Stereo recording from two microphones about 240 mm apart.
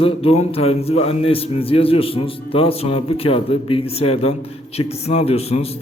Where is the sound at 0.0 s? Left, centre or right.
Left.